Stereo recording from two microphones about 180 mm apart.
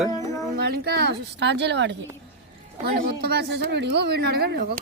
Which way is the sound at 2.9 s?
65° right (ahead or behind).